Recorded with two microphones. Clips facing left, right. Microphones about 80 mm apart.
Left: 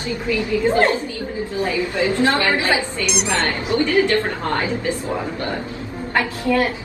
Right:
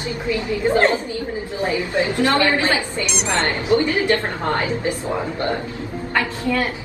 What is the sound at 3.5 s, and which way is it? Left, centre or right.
A woman's voice, right.